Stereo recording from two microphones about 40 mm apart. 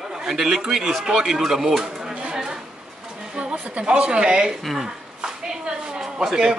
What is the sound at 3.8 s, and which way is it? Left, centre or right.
Speech, right.